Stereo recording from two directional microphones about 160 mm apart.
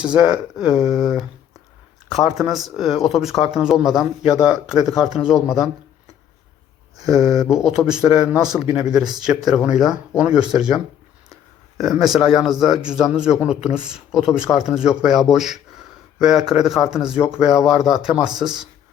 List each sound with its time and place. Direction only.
0.0 s a man's voice: 5° right (ahead or behind)
7.0 s a man's voice: centre (ahead or behind)
11.8 s a man's voice: centre (ahead or behind)